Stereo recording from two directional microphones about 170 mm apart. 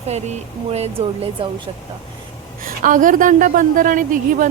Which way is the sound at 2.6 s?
50° right (ahead or behind).